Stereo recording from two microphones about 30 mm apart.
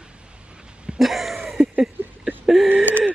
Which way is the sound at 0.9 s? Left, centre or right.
Centre.